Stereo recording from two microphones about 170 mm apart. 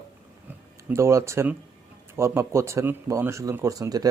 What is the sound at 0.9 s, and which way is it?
Speech, 15° right (ahead or behind).